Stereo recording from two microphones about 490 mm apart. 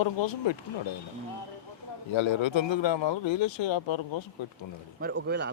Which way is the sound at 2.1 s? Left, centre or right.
Left.